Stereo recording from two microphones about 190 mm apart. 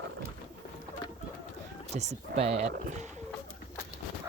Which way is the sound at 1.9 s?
35° right (ahead or behind).